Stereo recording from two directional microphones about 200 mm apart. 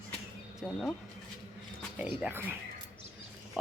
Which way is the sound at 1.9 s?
10° right (ahead or behind).